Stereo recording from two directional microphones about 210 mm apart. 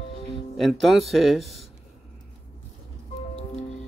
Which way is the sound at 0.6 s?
Centre (ahead or behind).